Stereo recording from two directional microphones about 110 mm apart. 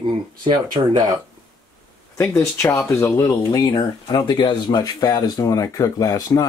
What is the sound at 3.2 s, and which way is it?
Speech, 35° left (ahead or behind).